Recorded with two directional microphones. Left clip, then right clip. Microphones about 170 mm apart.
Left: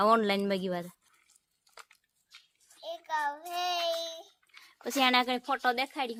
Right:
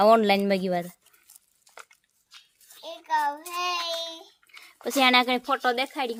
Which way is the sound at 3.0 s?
45° left (ahead or behind).